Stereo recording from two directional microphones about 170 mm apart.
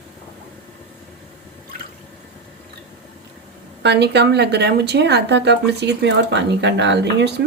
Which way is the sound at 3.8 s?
85° right.